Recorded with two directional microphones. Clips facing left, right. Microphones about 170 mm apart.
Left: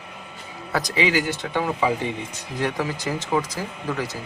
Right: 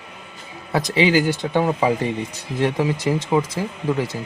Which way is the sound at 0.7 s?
25° right (ahead or behind).